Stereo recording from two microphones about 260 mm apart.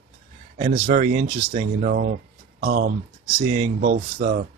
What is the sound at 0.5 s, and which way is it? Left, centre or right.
Speech, right.